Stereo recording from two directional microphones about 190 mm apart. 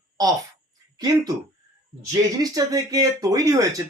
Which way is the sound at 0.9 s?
20° right (ahead or behind).